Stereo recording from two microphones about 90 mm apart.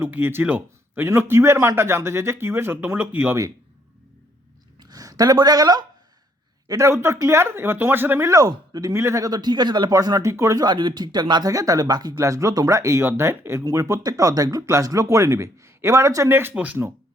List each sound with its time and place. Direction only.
0.0 s a man's voice: 25° right (ahead or behind)
4.8 s speech: 45° right (ahead or behind)
6.7 s a man's voice: 35° right (ahead or behind)
8.3 s speech: 45° right (ahead or behind)
8.9 s speech: 30° right (ahead or behind); by 9.9 s 55° right (ahead or behind)
9.9 s speech: 45° right (ahead or behind)
10.2 s speech: 35° right (ahead or behind)
10.6 s speech: 55° right (ahead or behind)
12.1 s speech: 35° right (ahead or behind); by 16.7 s 20° right (ahead or behind)